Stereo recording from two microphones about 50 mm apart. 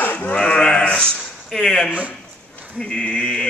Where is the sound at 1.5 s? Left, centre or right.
Centre.